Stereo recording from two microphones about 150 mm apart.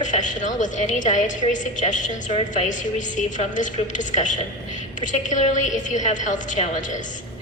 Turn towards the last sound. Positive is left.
turn(degrees=55)  # may be behind; listen again after turning